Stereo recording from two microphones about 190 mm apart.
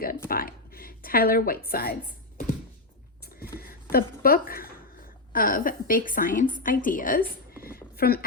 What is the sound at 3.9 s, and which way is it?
A woman's voice, 50° left (ahead or behind).